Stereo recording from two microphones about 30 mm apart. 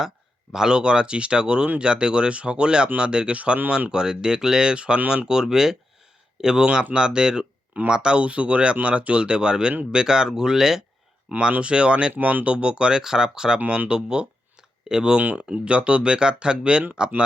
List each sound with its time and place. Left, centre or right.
0.7 s speech: right
8.2 s speech: right; by 10.8 s centre
11.3 s speech: right
12.2 s speech: right
12.5 s speech: right
12.9 s speech: centre
13.7 s speech: right
14.8 s speech: right
15.2 s speech: right
15.4 s speech: right